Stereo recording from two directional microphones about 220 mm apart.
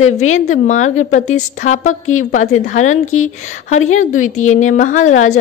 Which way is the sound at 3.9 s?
35° left (ahead or behind).